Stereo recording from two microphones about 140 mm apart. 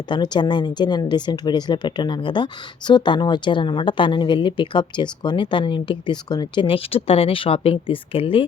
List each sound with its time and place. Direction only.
0.1 s speech: 30° left (ahead or behind)